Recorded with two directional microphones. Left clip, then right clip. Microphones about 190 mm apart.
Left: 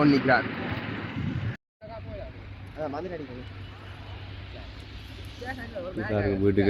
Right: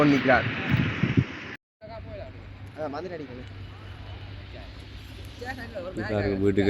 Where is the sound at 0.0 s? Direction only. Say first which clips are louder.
Right 1 dB; 55° right (ahead or behind).